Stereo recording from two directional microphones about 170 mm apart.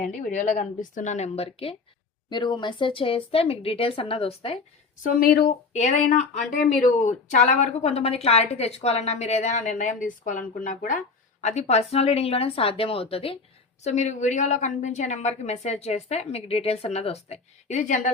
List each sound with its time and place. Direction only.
0.2 s speech: 45° left (ahead or behind)
5.0 s speech: 60° left (ahead or behind)
5.7 s speech: 45° left (ahead or behind)